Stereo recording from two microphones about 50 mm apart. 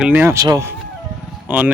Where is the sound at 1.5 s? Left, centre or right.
Right.